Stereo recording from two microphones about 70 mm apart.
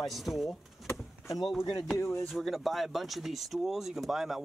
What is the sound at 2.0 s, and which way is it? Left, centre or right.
Speech, left.